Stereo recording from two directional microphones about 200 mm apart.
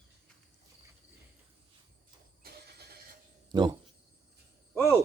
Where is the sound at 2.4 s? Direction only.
50° right (ahead or behind).